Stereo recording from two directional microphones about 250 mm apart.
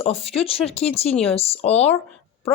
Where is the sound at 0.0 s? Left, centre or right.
Left.